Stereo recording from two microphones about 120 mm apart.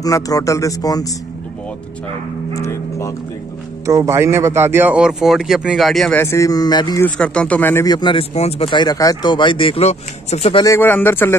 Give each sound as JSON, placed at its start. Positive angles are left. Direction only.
{"t": 0.0, "sound": "speech", "side_deg": 30}
{"t": 2.5, "sound": "cattle", "side_deg": 25}
{"t": 3.8, "sound": "speech", "side_deg": -25}
{"t": 6.1, "sound": "speech", "side_deg": 20}
{"t": 7.0, "sound": "speech", "side_deg": 10}
{"t": 7.8, "sound": "speech", "side_deg": 35}
{"t": 8.4, "sound": "speech", "side_deg": 55}
{"t": 10.6, "sound": "speech", "side_deg": 20}